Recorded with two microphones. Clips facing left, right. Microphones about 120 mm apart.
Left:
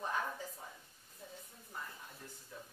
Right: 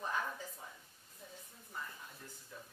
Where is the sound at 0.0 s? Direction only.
30° left (ahead or behind).